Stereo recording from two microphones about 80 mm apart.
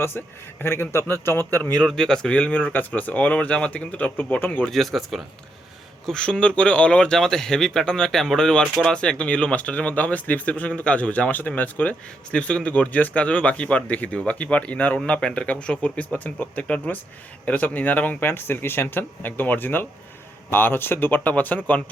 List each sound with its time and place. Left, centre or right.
0.6 s a man's voice: left
1.7 s speech: centre
4.6 s speech: centre; by 21.8 s left